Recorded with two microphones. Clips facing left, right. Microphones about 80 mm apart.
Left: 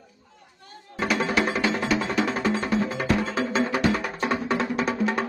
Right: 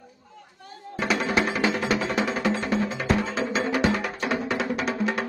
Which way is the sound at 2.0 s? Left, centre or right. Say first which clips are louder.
Left 1 dB; right.